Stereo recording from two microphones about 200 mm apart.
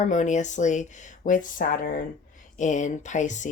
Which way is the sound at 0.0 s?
40° left (ahead or behind).